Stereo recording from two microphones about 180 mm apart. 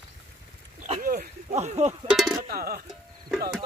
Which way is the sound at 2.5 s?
55° right (ahead or behind).